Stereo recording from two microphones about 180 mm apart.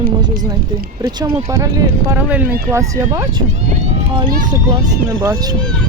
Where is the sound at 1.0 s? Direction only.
20° right (ahead or behind).